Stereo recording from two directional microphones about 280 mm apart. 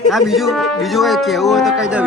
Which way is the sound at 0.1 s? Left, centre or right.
Centre.